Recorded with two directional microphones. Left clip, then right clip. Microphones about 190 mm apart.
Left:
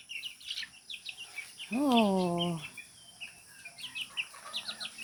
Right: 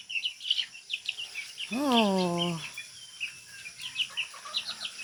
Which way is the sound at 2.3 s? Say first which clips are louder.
Right 3 dB; 20° right (ahead or behind).